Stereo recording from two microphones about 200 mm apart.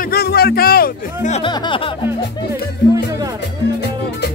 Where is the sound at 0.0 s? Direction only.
50° left (ahead or behind).